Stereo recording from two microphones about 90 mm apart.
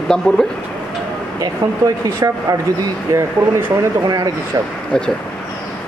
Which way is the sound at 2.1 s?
40° right (ahead or behind).